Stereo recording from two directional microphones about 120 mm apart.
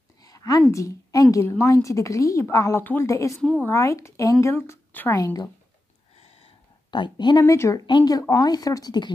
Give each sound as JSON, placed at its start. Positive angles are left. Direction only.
{"t": 0.2, "sound": "a woman's voice", "side_deg": 30}
{"t": 2.8, "sound": "a woman's voice", "side_deg": 15}
{"t": 3.1, "sound": "speech", "side_deg": 25}
{"t": 6.1, "sound": "a sound", "side_deg": 55}
{"t": 6.9, "sound": "speech", "side_deg": 40}
{"t": 7.4, "sound": "speech", "side_deg": 25}
{"t": 7.8, "sound": "speech", "side_deg": 35}